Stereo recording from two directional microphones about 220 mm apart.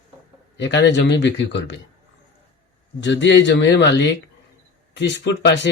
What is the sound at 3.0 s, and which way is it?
Speech, 55° left (ahead or behind).